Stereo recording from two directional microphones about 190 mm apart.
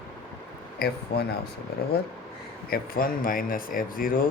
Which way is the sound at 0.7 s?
55° left (ahead or behind).